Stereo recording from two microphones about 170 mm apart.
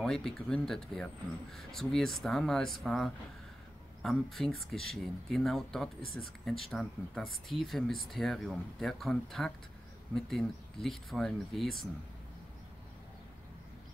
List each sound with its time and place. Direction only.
0.0 s speech: 5° left (ahead or behind)